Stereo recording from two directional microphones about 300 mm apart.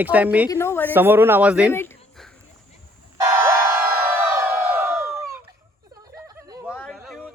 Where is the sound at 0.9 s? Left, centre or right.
Centre.